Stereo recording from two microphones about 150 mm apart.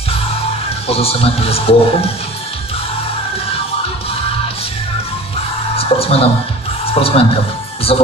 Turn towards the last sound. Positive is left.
turn(degrees=40)  # may be behind; listen again after turning